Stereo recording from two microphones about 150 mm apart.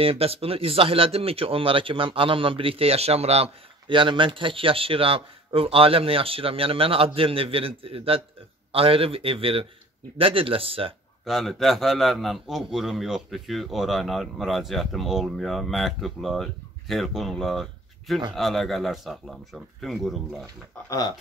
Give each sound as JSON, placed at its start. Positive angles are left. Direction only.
{"t": 0.0, "sound": "speech", "side_deg": -40}
{"t": 11.2, "sound": "a man's voice", "side_deg": 0}